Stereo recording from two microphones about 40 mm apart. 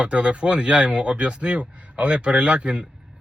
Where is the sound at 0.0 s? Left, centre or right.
Right.